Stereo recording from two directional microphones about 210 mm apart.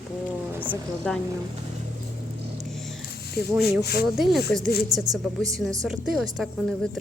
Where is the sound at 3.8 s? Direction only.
45° left (ahead or behind).